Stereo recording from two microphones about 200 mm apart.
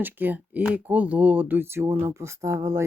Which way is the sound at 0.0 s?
10° right (ahead or behind).